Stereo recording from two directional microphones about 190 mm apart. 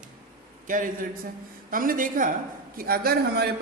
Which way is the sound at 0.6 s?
45° right (ahead or behind).